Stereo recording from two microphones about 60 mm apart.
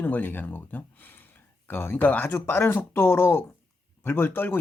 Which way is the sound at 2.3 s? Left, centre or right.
Left.